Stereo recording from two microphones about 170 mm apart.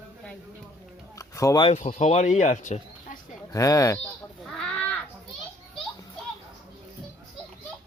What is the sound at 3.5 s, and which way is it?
Speech, 20° left (ahead or behind).